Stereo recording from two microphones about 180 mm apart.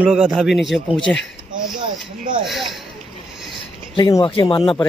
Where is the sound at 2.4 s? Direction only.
Centre (ahead or behind).